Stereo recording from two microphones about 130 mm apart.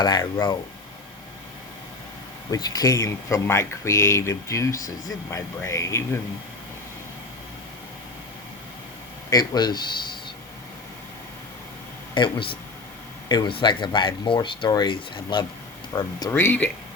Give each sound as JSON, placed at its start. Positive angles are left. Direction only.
{"t": 0.0, "sound": "speech", "side_deg": 30}
{"t": 2.5, "sound": "speech", "side_deg": 30}
{"t": 9.3, "sound": "speech", "side_deg": 30}
{"t": 12.1, "sound": "speech", "side_deg": 40}
{"t": 16.3, "sound": "speech", "side_deg": 15}